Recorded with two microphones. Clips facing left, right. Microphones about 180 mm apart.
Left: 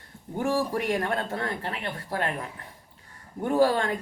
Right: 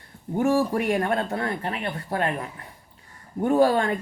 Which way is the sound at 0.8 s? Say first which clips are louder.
Right 4 dB; 15° right (ahead or behind).